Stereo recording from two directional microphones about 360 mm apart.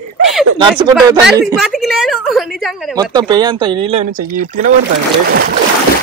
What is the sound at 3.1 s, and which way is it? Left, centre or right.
Speech, centre.